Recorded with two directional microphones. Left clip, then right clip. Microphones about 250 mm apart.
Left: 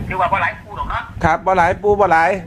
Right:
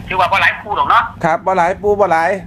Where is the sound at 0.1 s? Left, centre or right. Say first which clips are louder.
Right 5 dB; right.